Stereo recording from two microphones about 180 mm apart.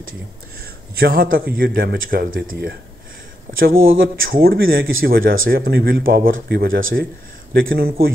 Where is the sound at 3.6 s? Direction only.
55° right (ahead or behind); by 7.1 s 75° right (ahead or behind).